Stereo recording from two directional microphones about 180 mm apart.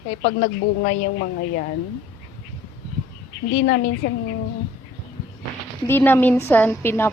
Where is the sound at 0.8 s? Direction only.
60° left (ahead or behind).